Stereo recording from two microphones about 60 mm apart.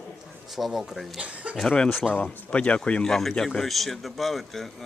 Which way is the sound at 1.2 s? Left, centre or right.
Right.